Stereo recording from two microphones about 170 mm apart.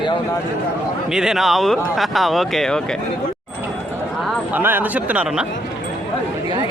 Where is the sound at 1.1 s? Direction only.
5° right (ahead or behind).